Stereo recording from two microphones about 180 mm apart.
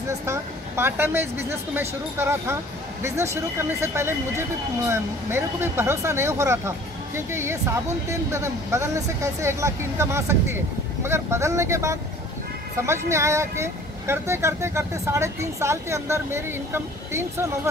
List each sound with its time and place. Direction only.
0.2 s speech: 15° right (ahead or behind)